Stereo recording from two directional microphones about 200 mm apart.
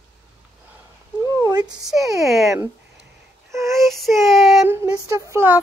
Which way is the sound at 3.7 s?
Centre (ahead or behind).